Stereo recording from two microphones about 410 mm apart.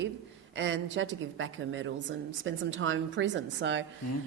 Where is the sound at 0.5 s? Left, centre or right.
Right.